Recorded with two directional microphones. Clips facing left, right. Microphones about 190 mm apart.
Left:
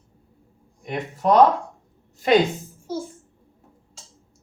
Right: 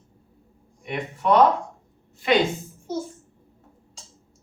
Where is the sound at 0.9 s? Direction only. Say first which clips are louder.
Left 1 dB; 40° left (ahead or behind).